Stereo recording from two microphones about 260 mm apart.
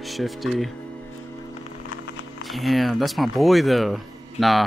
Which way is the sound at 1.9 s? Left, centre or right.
Left.